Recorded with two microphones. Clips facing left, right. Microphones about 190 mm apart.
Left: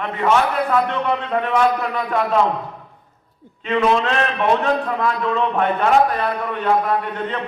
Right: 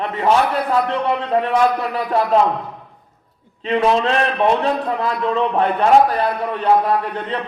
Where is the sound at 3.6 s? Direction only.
35° right (ahead or behind).